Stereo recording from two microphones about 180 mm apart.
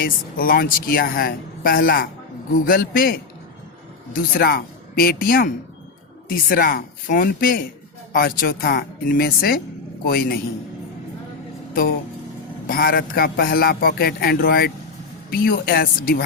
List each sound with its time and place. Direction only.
0.0 s a man's voice: 55° left (ahead or behind)
11.7 s a man's voice: 55° left (ahead or behind)